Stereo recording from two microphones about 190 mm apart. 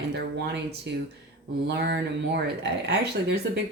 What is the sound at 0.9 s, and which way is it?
Speech, 65° right (ahead or behind).